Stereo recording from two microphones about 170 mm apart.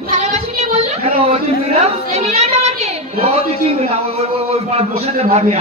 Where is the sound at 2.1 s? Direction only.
40° right (ahead or behind).